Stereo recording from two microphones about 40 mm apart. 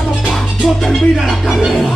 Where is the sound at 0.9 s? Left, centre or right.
Centre.